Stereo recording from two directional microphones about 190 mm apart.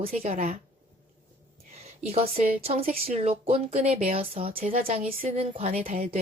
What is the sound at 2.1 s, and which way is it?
A woman's voice, 30° right (ahead or behind).